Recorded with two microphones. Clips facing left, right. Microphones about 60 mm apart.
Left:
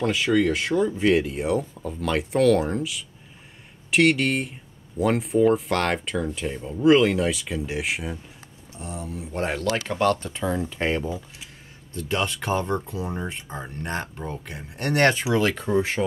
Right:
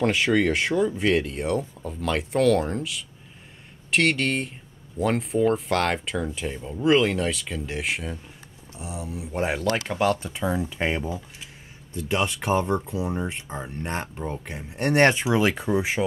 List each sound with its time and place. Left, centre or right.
0.0 s speech: right
0.3 s speech: right
0.7 s speech: centre